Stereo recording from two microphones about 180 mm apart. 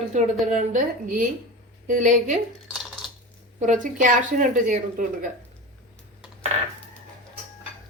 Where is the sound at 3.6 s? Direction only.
45° right (ahead or behind).